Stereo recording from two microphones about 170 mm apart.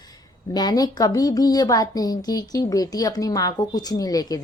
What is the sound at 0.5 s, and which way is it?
A woman's voice, 25° left (ahead or behind).